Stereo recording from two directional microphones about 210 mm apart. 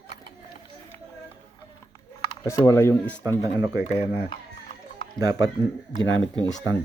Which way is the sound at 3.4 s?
15° right (ahead or behind).